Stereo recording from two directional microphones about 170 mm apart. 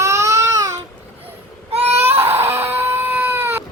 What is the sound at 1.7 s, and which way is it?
Baby cry, 35° right (ahead or behind).